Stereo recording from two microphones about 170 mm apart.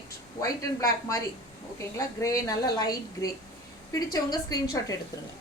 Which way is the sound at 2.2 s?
20° left (ahead or behind).